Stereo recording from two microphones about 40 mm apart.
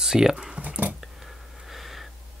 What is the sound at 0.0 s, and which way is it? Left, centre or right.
Speech, centre.